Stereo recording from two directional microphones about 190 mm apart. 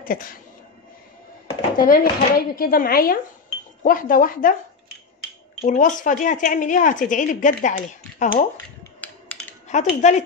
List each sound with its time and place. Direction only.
1.8 s speech: 50° left (ahead or behind)
5.6 s speech: 40° left (ahead or behind)
9.0 s a sound: 10° left (ahead or behind)
9.7 s speech: 40° left (ahead or behind)